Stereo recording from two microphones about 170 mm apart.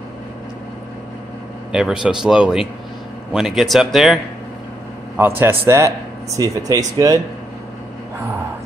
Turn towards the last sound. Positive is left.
turn(degrees=-20)  # may be behind; listen again after turning